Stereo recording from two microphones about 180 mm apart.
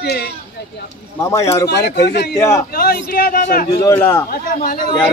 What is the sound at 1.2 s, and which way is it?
Speech, 15° left (ahead or behind).